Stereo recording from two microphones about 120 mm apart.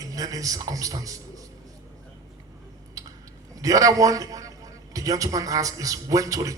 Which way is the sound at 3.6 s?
30° right (ahead or behind).